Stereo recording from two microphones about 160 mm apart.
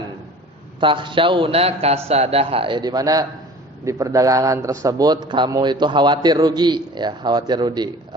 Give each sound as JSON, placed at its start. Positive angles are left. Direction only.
{"t": 0.8, "sound": "a man's voice", "side_deg": -30}